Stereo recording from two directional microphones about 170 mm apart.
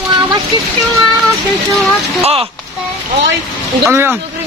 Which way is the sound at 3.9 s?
15° right (ahead or behind).